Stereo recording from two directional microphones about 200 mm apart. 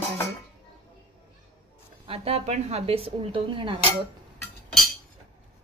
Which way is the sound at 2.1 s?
30° right (ahead or behind).